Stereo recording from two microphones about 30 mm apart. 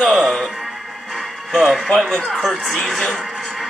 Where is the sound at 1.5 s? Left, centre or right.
Centre.